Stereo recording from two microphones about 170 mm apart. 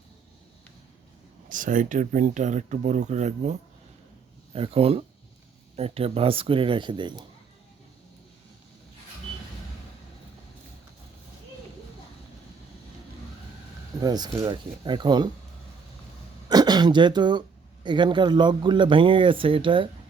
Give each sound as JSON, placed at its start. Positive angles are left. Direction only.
{"t": 1.5, "sound": "speech", "side_deg": -50}
{"t": 4.5, "sound": "speech", "side_deg": -35}
{"t": 14.0, "sound": "speech", "side_deg": -25}
{"t": 16.5, "sound": "speech", "side_deg": -25}